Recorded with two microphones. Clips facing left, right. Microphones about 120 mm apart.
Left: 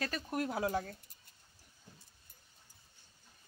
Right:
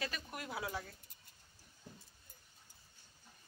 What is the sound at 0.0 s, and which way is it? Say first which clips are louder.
Speech: left 8 dB; 40° left (ahead or behind).